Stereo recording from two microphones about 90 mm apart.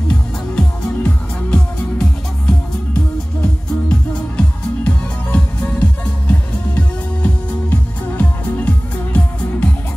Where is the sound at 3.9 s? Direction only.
10° left (ahead or behind).